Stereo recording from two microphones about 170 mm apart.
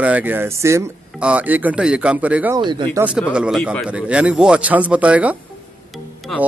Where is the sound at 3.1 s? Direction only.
5° right (ahead or behind).